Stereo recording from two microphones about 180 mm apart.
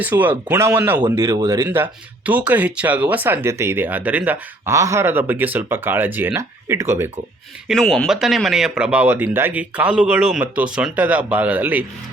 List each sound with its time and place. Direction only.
0.0 s speech: 10° right (ahead or behind)
7.7 s speech: centre (ahead or behind)